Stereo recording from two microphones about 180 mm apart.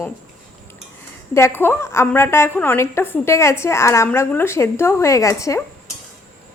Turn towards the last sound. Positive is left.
turn(degrees=15)  # may be behind; listen again after turning